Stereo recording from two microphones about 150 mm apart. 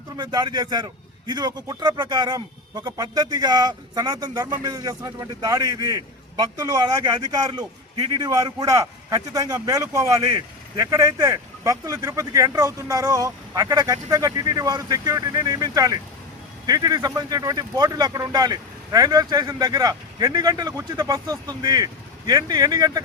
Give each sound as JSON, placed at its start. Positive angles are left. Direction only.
{"t": 0.2, "sound": "speech", "side_deg": -30}